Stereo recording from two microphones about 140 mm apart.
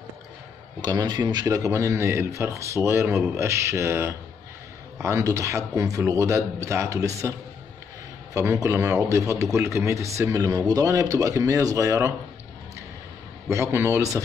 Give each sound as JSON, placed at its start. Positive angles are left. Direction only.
{"t": 0.7, "sound": "speech", "side_deg": -30}
{"t": 13.5, "sound": "speech", "side_deg": -20}